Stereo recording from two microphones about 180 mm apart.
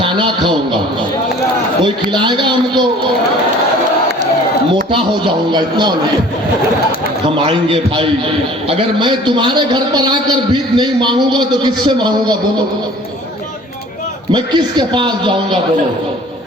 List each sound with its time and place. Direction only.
0.0 s a man's voice: 25° right (ahead or behind)
1.8 s a man's voice: 25° right (ahead or behind)
4.9 s a man's voice: 25° right (ahead or behind)
7.3 s a man's voice: 30° right (ahead or behind)
14.3 s a man's voice: 25° right (ahead or behind)